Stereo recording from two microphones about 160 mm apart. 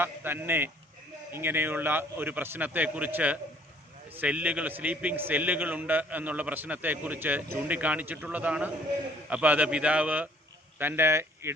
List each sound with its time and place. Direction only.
0.0 s a man's voice: 15° right (ahead or behind)